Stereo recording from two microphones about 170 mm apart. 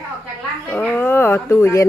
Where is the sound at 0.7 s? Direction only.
10° left (ahead or behind).